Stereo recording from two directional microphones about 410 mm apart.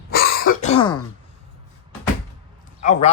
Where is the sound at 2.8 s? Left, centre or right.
Centre.